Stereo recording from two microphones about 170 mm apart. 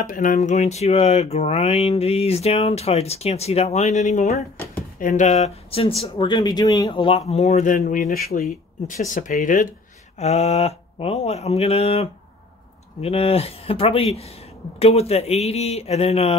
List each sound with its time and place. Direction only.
0.0 s speech: 50° left (ahead or behind)
8.5 s speech: 50° left (ahead or behind)
10.1 s speech: 40° left (ahead or behind)